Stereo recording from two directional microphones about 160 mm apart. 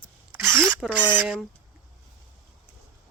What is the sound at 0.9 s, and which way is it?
Speech, 10° right (ahead or behind).